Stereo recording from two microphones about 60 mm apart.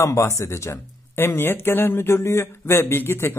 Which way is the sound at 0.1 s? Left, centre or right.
Left.